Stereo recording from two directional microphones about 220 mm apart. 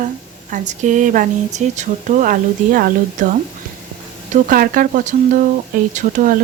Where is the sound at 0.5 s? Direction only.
35° right (ahead or behind).